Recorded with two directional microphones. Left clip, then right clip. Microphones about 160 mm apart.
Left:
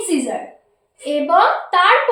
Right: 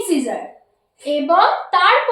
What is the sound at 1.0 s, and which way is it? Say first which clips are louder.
Speech: even; 25° left (ahead or behind).